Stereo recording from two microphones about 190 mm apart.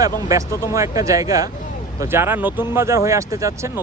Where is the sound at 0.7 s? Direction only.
15° right (ahead or behind).